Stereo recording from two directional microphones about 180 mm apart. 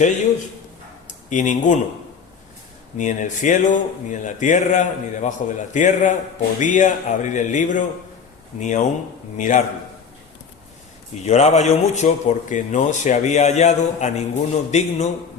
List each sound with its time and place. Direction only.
1.0 s speech: 45° left (ahead or behind)
3.0 s speech: 45° left (ahead or behind)
11.3 s a man's voice: 40° left (ahead or behind)